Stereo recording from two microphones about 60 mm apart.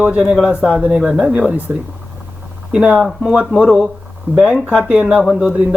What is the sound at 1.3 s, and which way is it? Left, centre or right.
Speech, right.